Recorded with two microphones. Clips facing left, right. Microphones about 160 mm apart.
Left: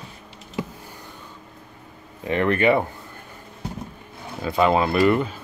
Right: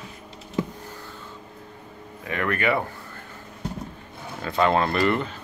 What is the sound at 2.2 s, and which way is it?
Speech, 25° left (ahead or behind).